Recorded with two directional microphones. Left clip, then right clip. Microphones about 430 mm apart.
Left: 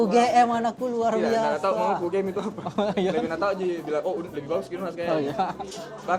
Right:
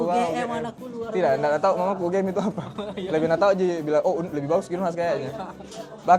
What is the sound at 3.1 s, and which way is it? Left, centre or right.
A man's voice, right.